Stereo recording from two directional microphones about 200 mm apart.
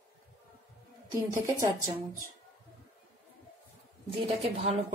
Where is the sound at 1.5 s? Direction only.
15° right (ahead or behind).